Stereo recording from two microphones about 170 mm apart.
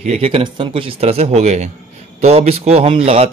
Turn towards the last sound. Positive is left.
turn(degrees=-35)  # may be behind; listen again after turning